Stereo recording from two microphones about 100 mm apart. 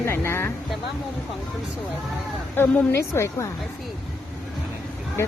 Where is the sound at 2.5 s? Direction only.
20° left (ahead or behind).